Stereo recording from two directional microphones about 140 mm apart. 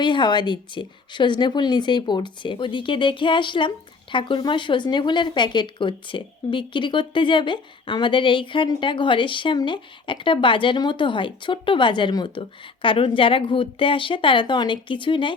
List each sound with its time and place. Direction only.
0.0 s speech: 35° left (ahead or behind)